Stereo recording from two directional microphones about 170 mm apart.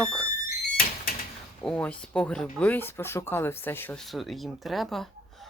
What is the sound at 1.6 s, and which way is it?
Speech, 10° left (ahead or behind).